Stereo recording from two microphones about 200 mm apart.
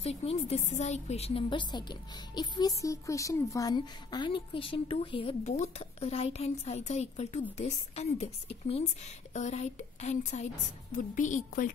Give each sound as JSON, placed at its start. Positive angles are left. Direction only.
{"t": 0.0, "sound": "a woman's voice", "side_deg": 30}